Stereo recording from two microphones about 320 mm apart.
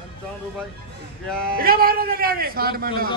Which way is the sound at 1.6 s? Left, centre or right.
Right.